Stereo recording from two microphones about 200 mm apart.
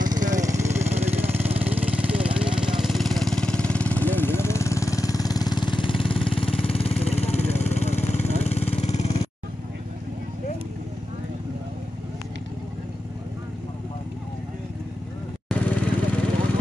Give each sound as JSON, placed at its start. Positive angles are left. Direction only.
{"t": 0.0, "sound": "vehicle", "side_deg": -20}
{"t": 15.4, "sound": "vehicle", "side_deg": 5}